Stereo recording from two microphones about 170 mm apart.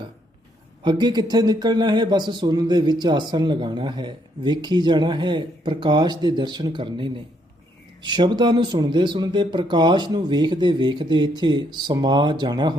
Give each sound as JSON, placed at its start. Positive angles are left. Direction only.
{"t": 0.8, "sound": "speech", "side_deg": -25}